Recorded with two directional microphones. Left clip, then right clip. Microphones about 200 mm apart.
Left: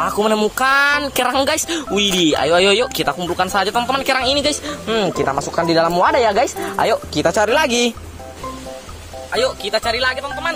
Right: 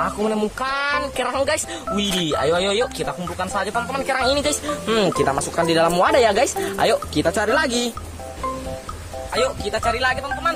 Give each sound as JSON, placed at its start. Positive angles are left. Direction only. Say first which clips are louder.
{"t": 0.0, "sound": "a woman's voice", "louder": "left 5 dB", "side_deg": 40}
{"t": 4.8, "sound": "speech", "louder": "left 1 dB", "side_deg": -10}
{"t": 5.9, "sound": "speech", "louder": "left 2 dB", "side_deg": -15}
{"t": 7.2, "sound": "speech", "louder": "left 4 dB", "side_deg": 5}
{"t": 9.3, "sound": "a woman's voice", "louder": "left 4 dB", "side_deg": 30}